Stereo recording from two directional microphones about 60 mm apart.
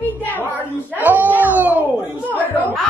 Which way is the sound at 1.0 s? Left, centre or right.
Right.